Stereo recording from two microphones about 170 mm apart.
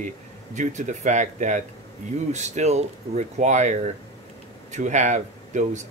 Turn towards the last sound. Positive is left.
turn(degrees=-45)  # may be behind; listen again after turning